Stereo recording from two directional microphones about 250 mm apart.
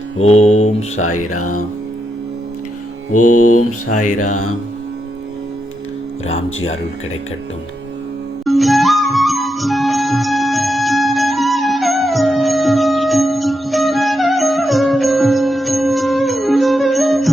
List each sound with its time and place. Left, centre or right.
0.2 s mantra: left
3.1 s mantra: left
6.2 s speech: left
8.4 s music: centre